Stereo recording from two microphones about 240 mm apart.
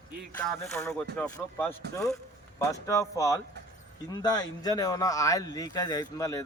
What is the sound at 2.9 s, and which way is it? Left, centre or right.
Speech, centre.